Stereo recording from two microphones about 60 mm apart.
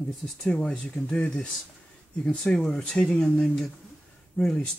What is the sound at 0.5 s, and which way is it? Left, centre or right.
Speech, centre.